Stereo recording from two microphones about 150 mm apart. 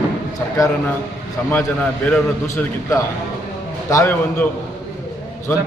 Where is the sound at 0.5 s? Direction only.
20° left (ahead or behind).